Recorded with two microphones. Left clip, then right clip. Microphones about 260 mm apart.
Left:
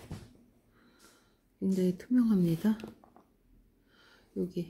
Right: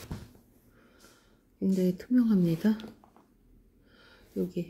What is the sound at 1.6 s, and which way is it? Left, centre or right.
Speech, centre.